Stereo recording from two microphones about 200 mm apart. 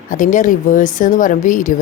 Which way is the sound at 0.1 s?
40° left (ahead or behind).